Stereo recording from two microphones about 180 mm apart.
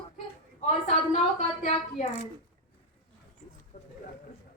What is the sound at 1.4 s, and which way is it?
Speech, 40° left (ahead or behind).